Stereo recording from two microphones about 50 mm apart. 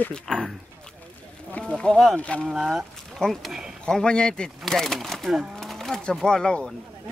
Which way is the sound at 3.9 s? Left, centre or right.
Centre.